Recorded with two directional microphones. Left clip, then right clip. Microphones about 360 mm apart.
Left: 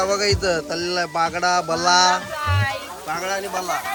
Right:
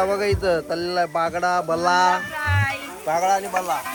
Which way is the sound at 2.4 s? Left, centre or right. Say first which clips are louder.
Right 1 dB; left.